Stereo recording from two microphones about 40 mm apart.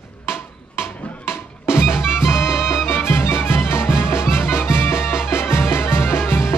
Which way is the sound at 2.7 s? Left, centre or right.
Left.